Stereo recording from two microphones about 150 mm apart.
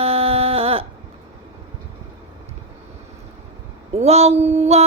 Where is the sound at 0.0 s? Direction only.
40° right (ahead or behind).